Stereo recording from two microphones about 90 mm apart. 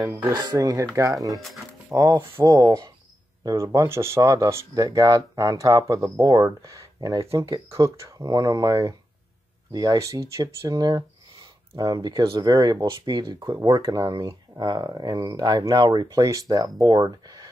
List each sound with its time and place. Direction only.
0.3 s speech: 55° right (ahead or behind)
0.6 s speech: 35° right (ahead or behind)
1.9 s speech: 35° right (ahead or behind); by 16.2 s 55° right (ahead or behind)
16.2 s speech: 40° right (ahead or behind)